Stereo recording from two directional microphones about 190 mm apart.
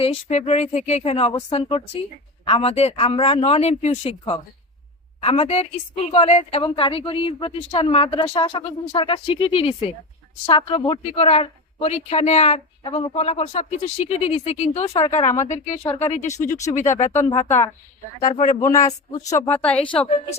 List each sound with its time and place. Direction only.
0.0 s a woman's voice: 35° left (ahead or behind)
18.6 s speech: 15° left (ahead or behind)